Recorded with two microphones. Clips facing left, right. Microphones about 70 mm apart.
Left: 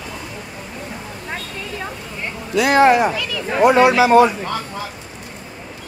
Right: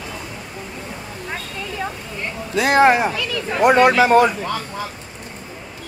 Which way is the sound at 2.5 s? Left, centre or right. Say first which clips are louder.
Left 1 dB; right.